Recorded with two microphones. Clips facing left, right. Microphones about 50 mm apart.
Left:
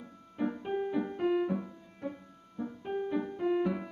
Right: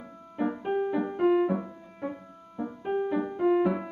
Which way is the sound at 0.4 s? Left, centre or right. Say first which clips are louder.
Right 5 dB; centre.